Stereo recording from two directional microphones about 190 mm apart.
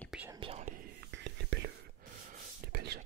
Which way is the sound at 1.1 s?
65° right (ahead or behind).